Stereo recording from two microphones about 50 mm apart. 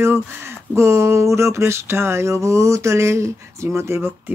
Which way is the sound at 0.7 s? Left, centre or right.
Right.